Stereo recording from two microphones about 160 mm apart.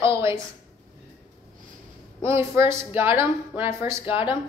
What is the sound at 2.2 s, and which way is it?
Speech, 15° right (ahead or behind).